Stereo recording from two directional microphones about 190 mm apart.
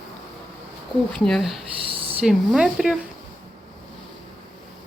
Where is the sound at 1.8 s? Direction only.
30° right (ahead or behind).